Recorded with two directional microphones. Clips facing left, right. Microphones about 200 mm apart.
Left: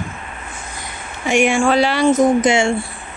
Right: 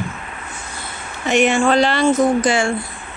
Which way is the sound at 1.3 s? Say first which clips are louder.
Even; 10° left (ahead or behind).